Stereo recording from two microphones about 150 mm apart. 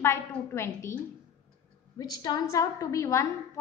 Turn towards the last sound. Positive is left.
turn(degrees=20)  # may be behind; listen again after turning